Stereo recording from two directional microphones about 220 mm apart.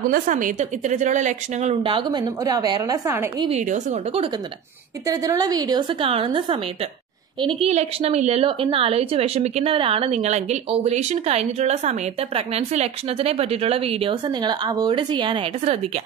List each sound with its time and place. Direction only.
0.1 s a woman's voice: 35° right (ahead or behind); by 3.4 s 15° right (ahead or behind)
3.4 s a woman's voice: 30° right (ahead or behind)
5.0 s a woman's voice: 15° right (ahead or behind)